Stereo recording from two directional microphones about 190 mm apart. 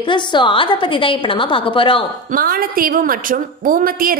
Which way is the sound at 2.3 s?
50° right (ahead or behind).